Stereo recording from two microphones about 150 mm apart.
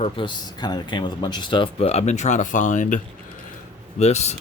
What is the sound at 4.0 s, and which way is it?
Speech, 45° left (ahead or behind).